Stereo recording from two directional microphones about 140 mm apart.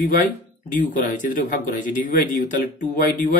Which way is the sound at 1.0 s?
70° left (ahead or behind).